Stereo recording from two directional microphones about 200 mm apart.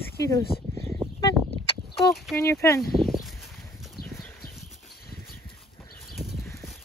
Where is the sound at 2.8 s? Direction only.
Centre (ahead or behind).